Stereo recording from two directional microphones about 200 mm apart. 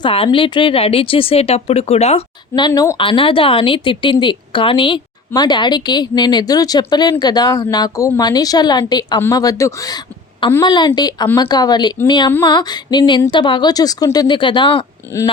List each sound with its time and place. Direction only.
0.0 s a woman's voice: 25° left (ahead or behind)